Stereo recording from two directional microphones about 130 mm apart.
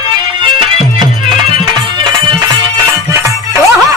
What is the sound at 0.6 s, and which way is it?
Music, 40° right (ahead or behind).